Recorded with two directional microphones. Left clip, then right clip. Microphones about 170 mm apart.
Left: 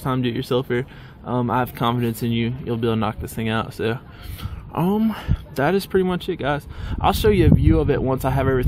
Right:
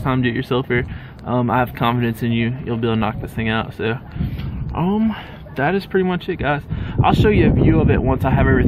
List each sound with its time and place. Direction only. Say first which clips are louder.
0.0 s speech: right 4 dB; 25° left (ahead or behind)